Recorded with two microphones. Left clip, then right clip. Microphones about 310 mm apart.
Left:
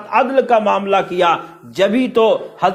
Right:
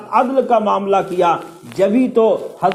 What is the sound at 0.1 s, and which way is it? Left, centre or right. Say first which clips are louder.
A man's voice: left 1 dB; left.